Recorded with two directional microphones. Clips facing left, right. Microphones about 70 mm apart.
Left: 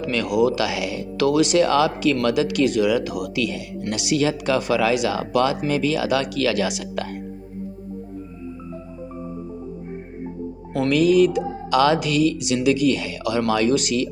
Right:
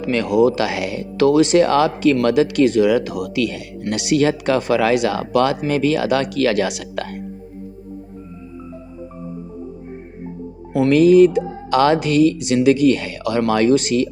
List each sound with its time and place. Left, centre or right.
0.0 s speech: right
10.8 s speech: right